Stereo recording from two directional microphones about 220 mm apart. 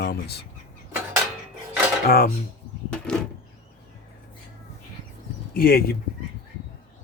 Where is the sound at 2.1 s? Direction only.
40° left (ahead or behind).